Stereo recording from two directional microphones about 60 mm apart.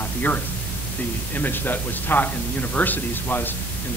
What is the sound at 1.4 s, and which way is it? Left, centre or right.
Speech, left.